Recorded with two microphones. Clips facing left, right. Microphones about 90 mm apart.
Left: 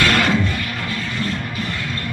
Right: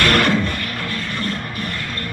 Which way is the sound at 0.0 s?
55° right (ahead or behind).